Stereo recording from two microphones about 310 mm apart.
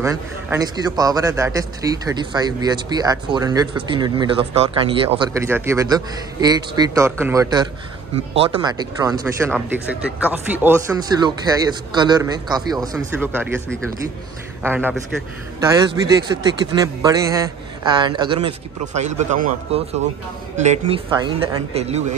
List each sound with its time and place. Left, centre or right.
0.0 s a man's voice: centre
14.6 s a man's voice: centre
16.8 s a man's voice: centre